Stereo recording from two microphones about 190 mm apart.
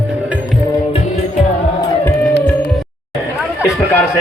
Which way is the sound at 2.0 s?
10° left (ahead or behind).